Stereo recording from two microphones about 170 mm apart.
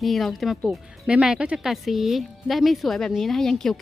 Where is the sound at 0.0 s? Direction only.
Centre (ahead or behind).